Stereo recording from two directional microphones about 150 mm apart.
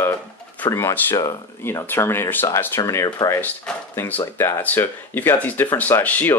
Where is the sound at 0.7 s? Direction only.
20° left (ahead or behind).